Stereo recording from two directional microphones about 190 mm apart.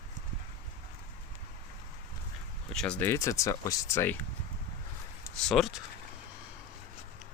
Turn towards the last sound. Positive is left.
turn(degrees=0)  # may be behind; listen again after turning